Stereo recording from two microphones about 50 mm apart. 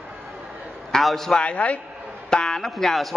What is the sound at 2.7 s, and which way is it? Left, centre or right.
Speech, centre.